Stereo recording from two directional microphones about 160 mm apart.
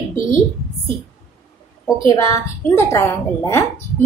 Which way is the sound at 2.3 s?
15° left (ahead or behind).